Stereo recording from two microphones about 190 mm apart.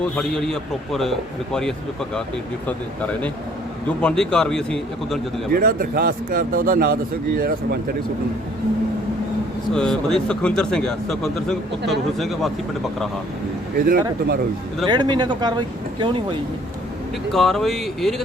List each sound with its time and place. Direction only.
0.0 s speech: 5° left (ahead or behind)
5.5 s speech: 50° right (ahead or behind)
9.7 s speech: 5° left (ahead or behind)
13.7 s speech: 50° right (ahead or behind)
14.8 s speech: 25° right (ahead or behind)
17.3 s speech: centre (ahead or behind)